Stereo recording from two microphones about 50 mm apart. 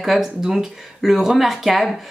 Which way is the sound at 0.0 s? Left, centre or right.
Centre.